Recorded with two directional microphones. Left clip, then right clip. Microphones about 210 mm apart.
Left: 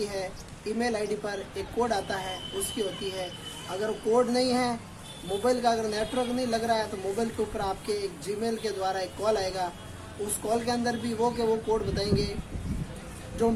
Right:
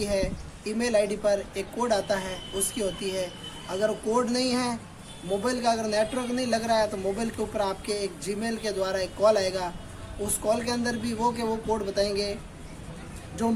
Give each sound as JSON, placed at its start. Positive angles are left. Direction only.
{"t": 0.0, "sound": "speech", "side_deg": -30}